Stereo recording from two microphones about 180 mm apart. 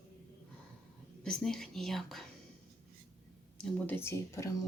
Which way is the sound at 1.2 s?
5° left (ahead or behind).